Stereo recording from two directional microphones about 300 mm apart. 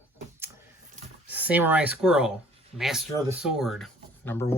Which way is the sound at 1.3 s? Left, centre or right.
Centre.